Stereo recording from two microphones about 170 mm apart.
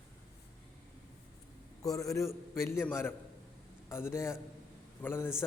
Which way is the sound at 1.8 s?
20° left (ahead or behind).